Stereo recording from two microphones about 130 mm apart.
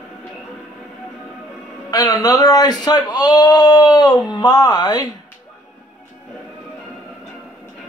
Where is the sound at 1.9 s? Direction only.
30° left (ahead or behind).